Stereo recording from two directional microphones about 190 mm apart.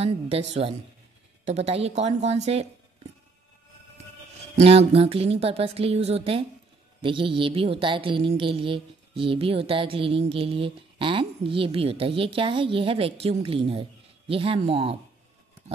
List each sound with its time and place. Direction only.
0.0 s speech: 35° right (ahead or behind)
4.6 s speech: 30° right (ahead or behind)